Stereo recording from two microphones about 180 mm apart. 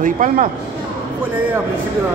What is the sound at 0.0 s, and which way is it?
Speech, 45° right (ahead or behind).